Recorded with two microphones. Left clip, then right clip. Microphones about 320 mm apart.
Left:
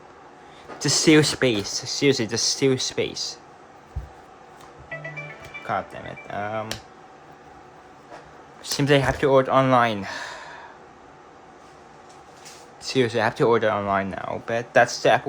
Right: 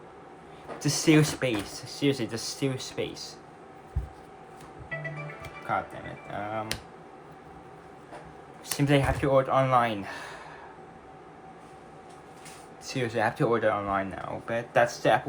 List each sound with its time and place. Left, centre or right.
0.8 s speech: left
5.7 s music: left
8.6 s speech: left
12.8 s speech: left